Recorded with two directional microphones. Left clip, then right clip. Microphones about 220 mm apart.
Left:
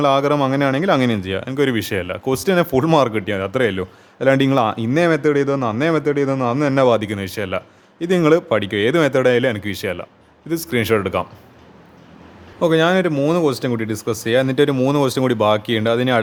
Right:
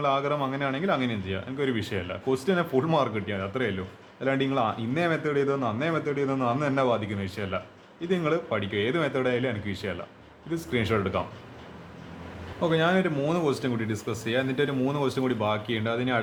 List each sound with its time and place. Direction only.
0.0 s speech: 50° left (ahead or behind)
12.5 s speech: 45° left (ahead or behind)